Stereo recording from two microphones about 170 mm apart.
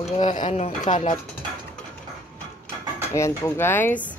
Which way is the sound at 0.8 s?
30° left (ahead or behind).